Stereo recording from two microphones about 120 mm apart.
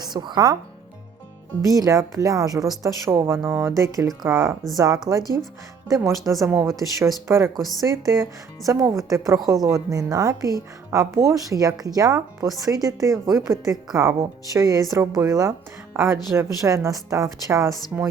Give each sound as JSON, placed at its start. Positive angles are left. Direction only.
{"t": 0.0, "sound": "speech", "side_deg": -35}
{"t": 1.7, "sound": "a woman's voice", "side_deg": -30}